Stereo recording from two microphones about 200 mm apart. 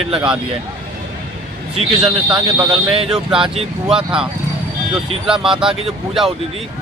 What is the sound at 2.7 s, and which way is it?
Speech, 30° right (ahead or behind).